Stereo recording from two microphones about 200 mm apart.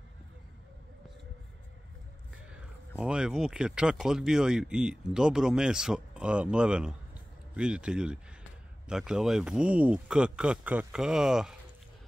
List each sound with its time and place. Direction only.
3.0 s speech: 5° right (ahead or behind)